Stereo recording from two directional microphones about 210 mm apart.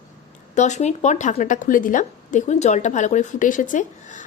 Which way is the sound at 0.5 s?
35° left (ahead or behind).